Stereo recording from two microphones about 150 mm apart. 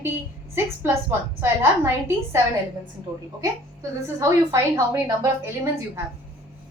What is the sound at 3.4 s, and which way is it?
A woman's voice, 20° right (ahead or behind).